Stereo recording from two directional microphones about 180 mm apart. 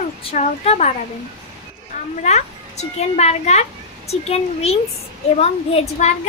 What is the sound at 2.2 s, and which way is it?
A woman's voice, 40° left (ahead or behind).